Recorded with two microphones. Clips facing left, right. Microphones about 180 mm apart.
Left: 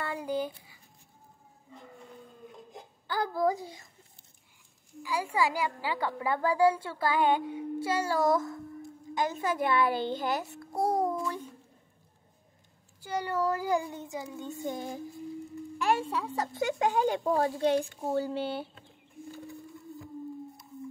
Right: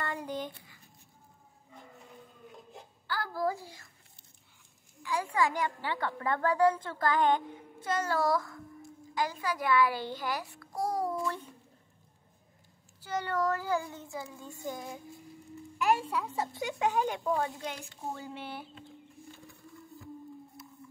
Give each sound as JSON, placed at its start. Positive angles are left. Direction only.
{"t": 0.0, "sound": "speech", "side_deg": 10}
{"t": 2.7, "sound": "a child's voice", "side_deg": 20}
{"t": 5.0, "sound": "a woman's voice", "side_deg": 10}
{"t": 13.0, "sound": "a woman's voice", "side_deg": 10}
{"t": 16.5, "sound": "speech", "side_deg": 45}
{"t": 16.9, "sound": "speech", "side_deg": 30}